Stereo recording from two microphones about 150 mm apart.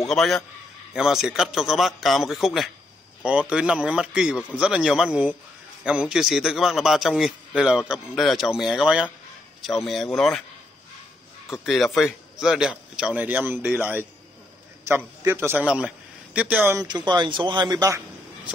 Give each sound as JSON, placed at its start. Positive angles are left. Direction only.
{"t": 0.0, "sound": "a man's voice", "side_deg": 0}
{"t": 11.6, "sound": "a man's voice", "side_deg": 0}
{"t": 15.2, "sound": "a man's voice", "side_deg": -15}
{"t": 16.8, "sound": "a man's voice", "side_deg": -30}